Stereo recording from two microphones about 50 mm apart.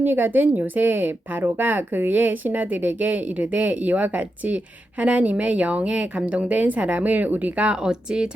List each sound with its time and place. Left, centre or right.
0.0 s speech: right; by 8.3 s centre